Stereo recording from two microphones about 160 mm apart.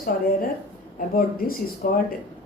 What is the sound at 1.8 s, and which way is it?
Speech, 60° left (ahead or behind).